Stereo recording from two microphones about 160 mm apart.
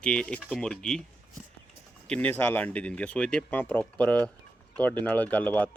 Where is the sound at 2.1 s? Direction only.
10° left (ahead or behind).